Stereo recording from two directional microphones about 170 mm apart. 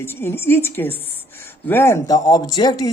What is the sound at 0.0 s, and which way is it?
A woman's voice, 15° left (ahead or behind).